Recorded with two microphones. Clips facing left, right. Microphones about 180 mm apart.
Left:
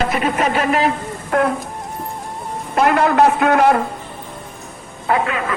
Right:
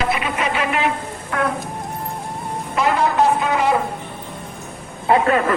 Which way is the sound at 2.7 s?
60° left (ahead or behind).